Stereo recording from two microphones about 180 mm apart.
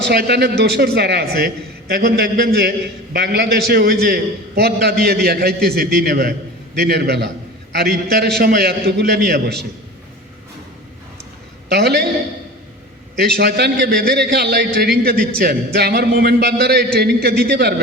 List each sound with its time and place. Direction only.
0.1 s a man's voice: 65° right (ahead or behind)
11.7 s a man's voice: 65° right (ahead or behind)
13.1 s a man's voice: 65° right (ahead or behind)